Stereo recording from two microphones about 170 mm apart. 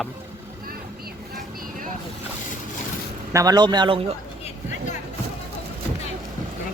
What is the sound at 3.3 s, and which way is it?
Speech, 20° right (ahead or behind).